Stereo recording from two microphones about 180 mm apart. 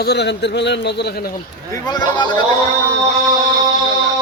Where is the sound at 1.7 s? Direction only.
20° left (ahead or behind).